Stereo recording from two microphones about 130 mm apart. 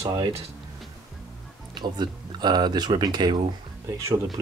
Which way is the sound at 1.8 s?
35° right (ahead or behind).